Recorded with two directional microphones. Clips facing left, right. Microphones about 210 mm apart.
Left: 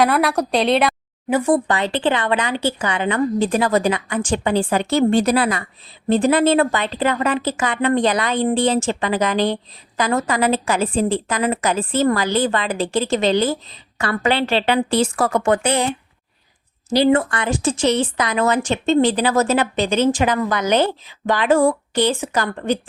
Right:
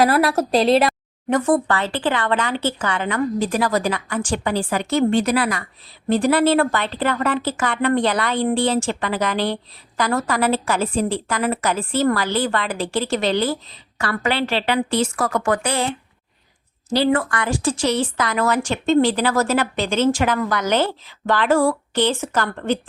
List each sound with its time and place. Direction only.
0.0 s a woman's voice: centre (ahead or behind)
1.4 s speech: 15° left (ahead or behind)
16.9 s speech: 20° left (ahead or behind)